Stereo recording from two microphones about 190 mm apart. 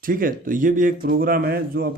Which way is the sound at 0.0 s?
45° right (ahead or behind).